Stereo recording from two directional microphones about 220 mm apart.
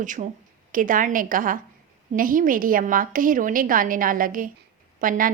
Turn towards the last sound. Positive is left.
turn(degrees=-40)  # may be behind; listen again after turning